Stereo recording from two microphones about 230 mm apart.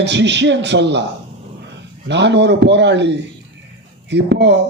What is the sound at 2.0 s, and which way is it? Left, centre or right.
Speech, right.